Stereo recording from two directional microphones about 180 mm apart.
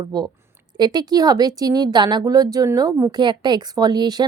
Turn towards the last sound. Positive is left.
turn(degrees=-25)  # may be behind; listen again after turning